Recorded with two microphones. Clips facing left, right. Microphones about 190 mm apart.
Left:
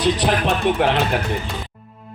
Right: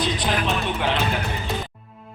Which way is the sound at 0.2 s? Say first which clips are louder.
Left 5 dB; 60° left (ahead or behind).